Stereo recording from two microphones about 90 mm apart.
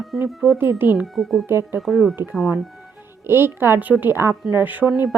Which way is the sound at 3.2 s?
25° right (ahead or behind).